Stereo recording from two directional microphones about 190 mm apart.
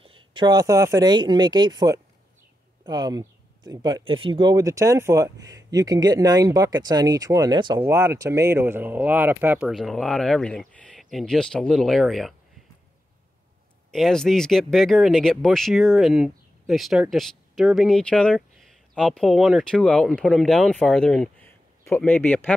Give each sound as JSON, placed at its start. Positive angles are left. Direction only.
{"t": 0.0, "sound": "speech", "side_deg": -25}
{"t": 13.9, "sound": "speech", "side_deg": 0}